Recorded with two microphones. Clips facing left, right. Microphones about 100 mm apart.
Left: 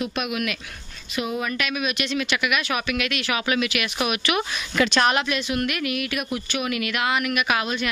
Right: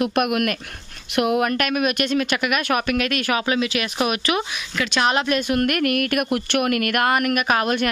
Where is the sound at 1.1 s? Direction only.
70° right (ahead or behind); by 3.4 s 45° right (ahead or behind).